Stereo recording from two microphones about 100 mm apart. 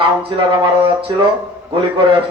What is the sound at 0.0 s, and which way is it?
A man's voice, 55° right (ahead or behind).